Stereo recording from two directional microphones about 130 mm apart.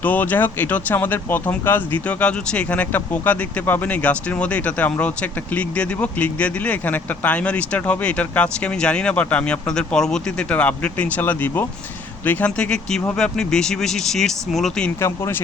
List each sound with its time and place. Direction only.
0.0 s speech: 15° left (ahead or behind)
15.0 s speech: 20° left (ahead or behind)